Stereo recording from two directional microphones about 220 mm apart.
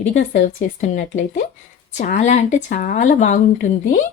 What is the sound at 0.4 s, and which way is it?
Speech, 35° left (ahead or behind).